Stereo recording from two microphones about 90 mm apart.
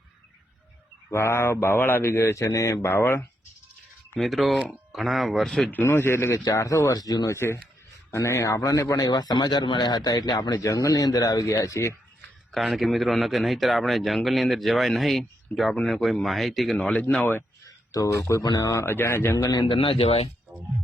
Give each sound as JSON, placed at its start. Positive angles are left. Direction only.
{"t": 1.1, "sound": "speech", "side_deg": 30}
{"t": 2.9, "sound": "speech", "side_deg": 25}
{"t": 4.2, "sound": "a man's voice", "side_deg": 0}
{"t": 5.7, "sound": "speech", "side_deg": 25}
{"t": 7.3, "sound": "a man's voice", "side_deg": 30}
{"t": 12.5, "sound": "a man's voice", "side_deg": 0}
{"t": 16.7, "sound": "speech", "side_deg": 15}
{"t": 17.7, "sound": "a sound", "side_deg": 40}
{"t": 18.2, "sound": "speech", "side_deg": 30}
{"t": 18.4, "sound": "a man's voice", "side_deg": 45}
{"t": 18.7, "sound": "speech", "side_deg": 30}
{"t": 19.5, "sound": "speech", "side_deg": 65}